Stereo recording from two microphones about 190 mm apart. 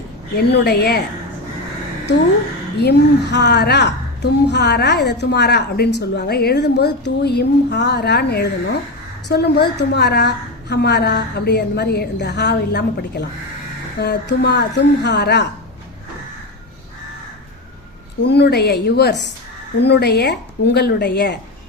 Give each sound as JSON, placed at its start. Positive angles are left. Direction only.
{"t": 0.3, "sound": "a woman's voice", "side_deg": 55}
{"t": 2.7, "sound": "a woman's voice", "side_deg": 60}
{"t": 18.3, "sound": "a woman's voice", "side_deg": 60}